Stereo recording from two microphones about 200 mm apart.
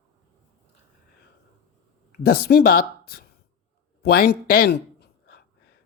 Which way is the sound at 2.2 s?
50° left (ahead or behind).